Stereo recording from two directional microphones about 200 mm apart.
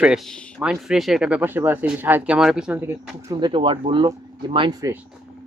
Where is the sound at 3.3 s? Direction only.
25° right (ahead or behind).